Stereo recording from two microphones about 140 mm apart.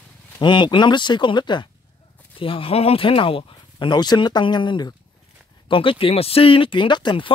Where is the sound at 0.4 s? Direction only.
35° left (ahead or behind).